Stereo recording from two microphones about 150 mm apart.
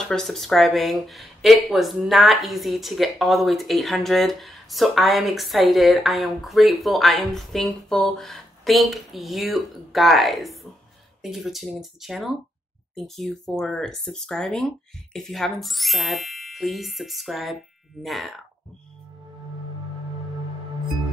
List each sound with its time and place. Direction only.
0.0 s speech: 5° left (ahead or behind)